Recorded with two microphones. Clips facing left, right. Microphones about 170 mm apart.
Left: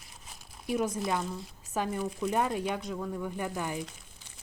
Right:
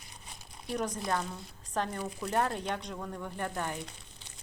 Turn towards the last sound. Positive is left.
turn(degrees=5)  # may be behind; listen again after turning